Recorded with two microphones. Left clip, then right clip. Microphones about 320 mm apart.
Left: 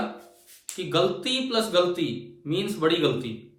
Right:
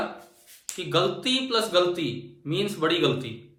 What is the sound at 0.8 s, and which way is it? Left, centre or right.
Speech, centre.